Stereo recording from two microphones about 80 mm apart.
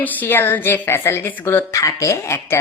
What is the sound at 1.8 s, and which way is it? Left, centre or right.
Speech, left.